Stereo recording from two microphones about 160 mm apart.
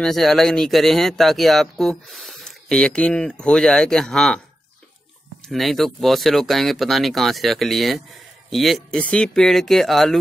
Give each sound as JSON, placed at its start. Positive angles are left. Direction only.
{"t": 0.0, "sound": "speech", "side_deg": 0}
{"t": 5.5, "sound": "speech", "side_deg": 0}